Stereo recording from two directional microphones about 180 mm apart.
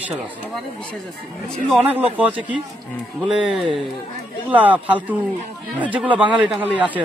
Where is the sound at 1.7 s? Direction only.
10° right (ahead or behind).